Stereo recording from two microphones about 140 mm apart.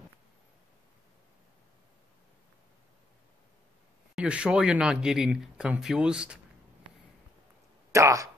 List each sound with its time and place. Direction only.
4.1 s speech: 5° right (ahead or behind)
7.9 s speech: 20° right (ahead or behind)